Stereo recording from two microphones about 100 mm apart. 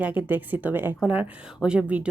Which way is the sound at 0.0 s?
15° right (ahead or behind).